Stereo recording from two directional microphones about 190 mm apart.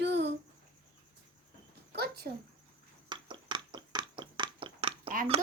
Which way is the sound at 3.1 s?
25° right (ahead or behind).